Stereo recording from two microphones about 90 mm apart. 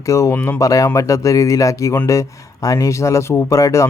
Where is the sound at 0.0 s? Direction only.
35° left (ahead or behind).